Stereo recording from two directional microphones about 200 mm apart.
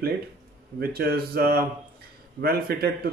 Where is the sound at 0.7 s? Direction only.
50° right (ahead or behind).